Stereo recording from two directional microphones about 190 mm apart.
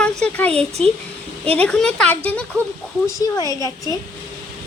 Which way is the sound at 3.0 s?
20° left (ahead or behind).